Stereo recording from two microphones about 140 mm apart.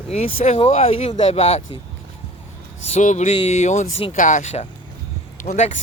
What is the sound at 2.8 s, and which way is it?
Speech, 60° left (ahead or behind).